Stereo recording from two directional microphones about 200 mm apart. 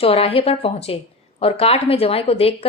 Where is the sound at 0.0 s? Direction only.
30° left (ahead or behind).